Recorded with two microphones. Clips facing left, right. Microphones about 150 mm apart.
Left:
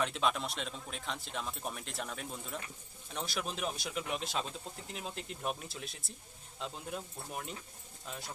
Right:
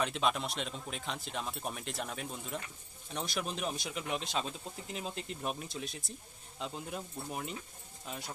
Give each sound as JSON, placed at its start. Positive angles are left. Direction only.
{"t": 0.0, "sound": "speech", "side_deg": 0}